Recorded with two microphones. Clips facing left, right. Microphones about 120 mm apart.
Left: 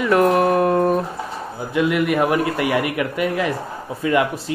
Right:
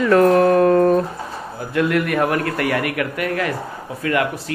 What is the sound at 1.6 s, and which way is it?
A man's voice, 15° left (ahead or behind).